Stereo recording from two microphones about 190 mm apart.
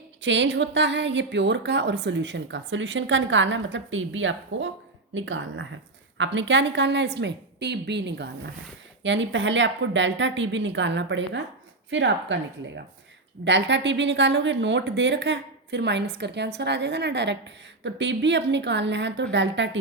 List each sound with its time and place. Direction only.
0.2 s speech: 70° right (ahead or behind); by 5.6 s 90° right
6.1 s a woman's voice: 75° right (ahead or behind)